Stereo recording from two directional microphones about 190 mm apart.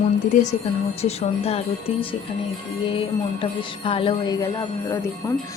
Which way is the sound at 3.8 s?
30° left (ahead or behind).